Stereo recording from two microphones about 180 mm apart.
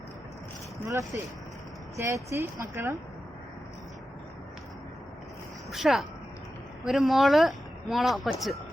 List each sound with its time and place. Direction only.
0.9 s speech: 20° right (ahead or behind)
5.7 s speech: centre (ahead or behind)